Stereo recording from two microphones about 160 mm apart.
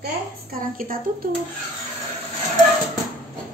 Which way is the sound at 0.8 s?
60° right (ahead or behind).